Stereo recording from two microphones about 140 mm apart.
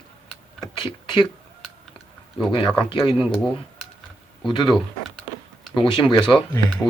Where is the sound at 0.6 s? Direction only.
30° left (ahead or behind).